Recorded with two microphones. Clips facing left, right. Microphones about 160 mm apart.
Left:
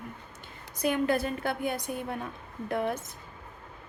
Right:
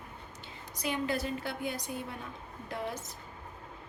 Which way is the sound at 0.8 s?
55° left (ahead or behind).